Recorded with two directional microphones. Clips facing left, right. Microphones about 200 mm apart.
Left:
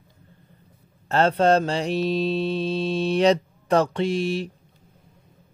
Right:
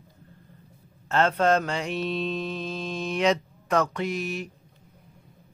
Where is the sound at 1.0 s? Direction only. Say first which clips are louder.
Left 3 dB; 35° left (ahead or behind).